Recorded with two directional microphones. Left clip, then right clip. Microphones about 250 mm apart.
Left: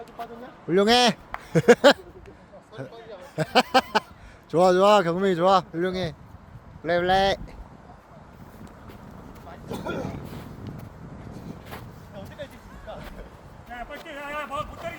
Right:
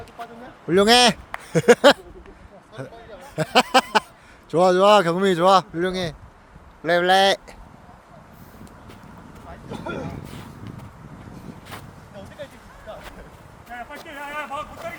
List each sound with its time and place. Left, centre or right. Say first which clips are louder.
0.7 s speech: right 4 dB; centre
3.2 s a sound: right 3 dB; centre
4.5 s speech: right 3 dB; centre
9.5 s vehicle: right 1 dB; left
12.9 s music: right 1 dB; left
13.7 s a sound: right 1 dB; left